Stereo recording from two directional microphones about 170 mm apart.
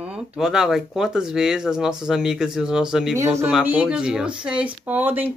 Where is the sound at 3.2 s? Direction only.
15° right (ahead or behind).